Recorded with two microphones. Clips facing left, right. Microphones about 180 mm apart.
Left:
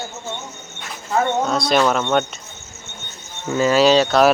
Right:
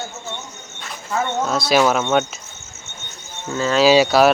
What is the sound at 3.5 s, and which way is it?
Cricket, 15° left (ahead or behind).